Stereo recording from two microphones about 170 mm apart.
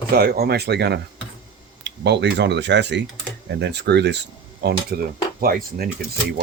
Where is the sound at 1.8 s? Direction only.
90° right.